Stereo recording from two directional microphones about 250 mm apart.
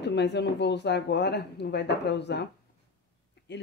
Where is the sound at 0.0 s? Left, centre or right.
Left.